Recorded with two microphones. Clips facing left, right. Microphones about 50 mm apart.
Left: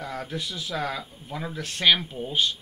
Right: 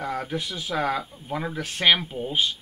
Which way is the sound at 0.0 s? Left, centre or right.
Right.